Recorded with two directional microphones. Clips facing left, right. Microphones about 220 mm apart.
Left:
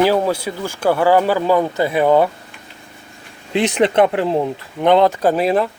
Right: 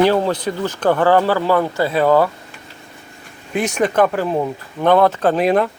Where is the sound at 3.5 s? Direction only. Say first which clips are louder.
Left 2 dB; 25° left (ahead or behind).